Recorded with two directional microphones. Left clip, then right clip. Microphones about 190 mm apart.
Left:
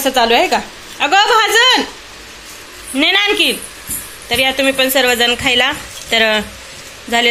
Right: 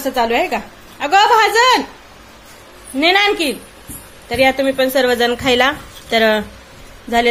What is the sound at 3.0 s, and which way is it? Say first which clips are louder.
Speech: left 1 dB; 5° right (ahead or behind).